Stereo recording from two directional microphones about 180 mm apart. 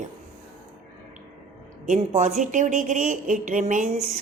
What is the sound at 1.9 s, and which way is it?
A woman's voice, 40° right (ahead or behind).